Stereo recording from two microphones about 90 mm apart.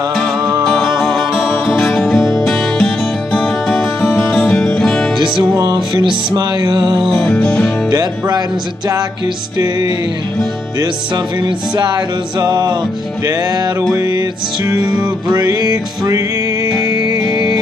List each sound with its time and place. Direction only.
0.1 s music: centre (ahead or behind)
5.1 s music: 60° right (ahead or behind)
7.2 s music: 15° left (ahead or behind)
7.9 s music: 50° right (ahead or behind)
9.6 s music: 50° right (ahead or behind)
11.4 s music: 55° right (ahead or behind)